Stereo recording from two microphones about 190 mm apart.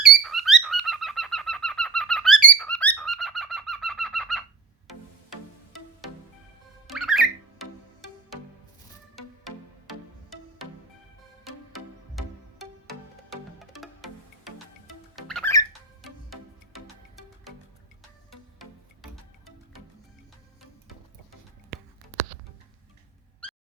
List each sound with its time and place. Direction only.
0.0 s bird: centre (ahead or behind)
6.8 s music: centre (ahead or behind)
9.1 s music: centre (ahead or behind)
15.1 s music: centre (ahead or behind)
23.4 s a sound: 5° left (ahead or behind)